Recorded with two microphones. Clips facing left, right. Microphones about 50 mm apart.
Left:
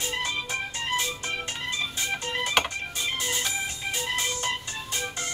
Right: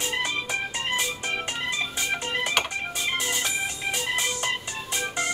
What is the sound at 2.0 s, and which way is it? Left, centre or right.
Organ, right.